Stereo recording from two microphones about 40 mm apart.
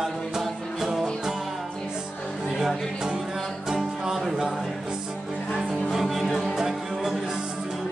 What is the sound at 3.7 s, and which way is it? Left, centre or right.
Music, centre.